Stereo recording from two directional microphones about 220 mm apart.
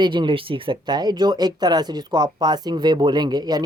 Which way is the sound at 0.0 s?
20° right (ahead or behind).